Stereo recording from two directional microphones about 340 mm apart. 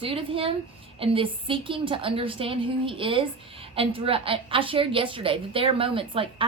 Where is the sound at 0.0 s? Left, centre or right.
Centre.